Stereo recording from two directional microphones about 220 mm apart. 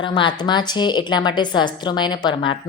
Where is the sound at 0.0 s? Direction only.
20° left (ahead or behind).